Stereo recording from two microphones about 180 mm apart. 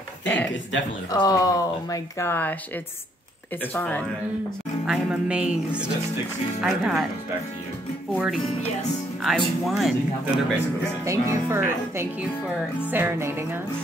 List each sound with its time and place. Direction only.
0.2 s speech: 10° left (ahead or behind)
1.1 s speech: 20° left (ahead or behind)
3.7 s speech: 10° left (ahead or behind)
4.8 s speech: 5° right (ahead or behind)
8.1 s speech: 5° right (ahead or behind)
11.1 s speech: 15° right (ahead or behind)